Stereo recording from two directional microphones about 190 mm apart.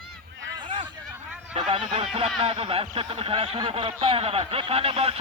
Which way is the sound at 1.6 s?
30° right (ahead or behind).